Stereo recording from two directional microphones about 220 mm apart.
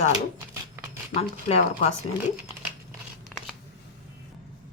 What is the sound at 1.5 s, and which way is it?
Speech, 30° left (ahead or behind).